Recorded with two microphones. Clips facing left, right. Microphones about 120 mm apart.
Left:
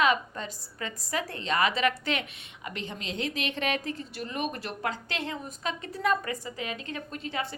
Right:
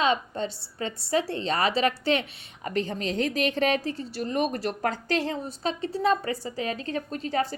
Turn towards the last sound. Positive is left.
turn(degrees=-35)  # may be behind; listen again after turning